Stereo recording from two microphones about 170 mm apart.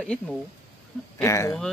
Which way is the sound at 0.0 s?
5° left (ahead or behind).